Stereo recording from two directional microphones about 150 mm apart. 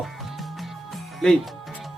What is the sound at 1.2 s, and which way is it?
Speech, 5° left (ahead or behind).